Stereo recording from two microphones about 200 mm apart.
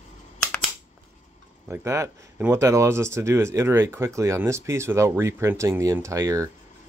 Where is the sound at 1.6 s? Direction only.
10° right (ahead or behind).